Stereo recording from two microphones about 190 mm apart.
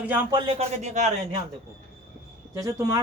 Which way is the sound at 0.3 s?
25° right (ahead or behind).